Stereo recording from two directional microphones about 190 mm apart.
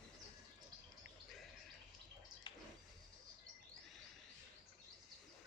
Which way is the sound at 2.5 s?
25° left (ahead or behind).